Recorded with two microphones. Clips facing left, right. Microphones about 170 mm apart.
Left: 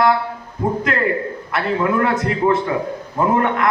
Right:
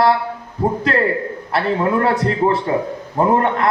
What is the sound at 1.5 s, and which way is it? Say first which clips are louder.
A man's voice: right 2 dB; 30° right (ahead or behind).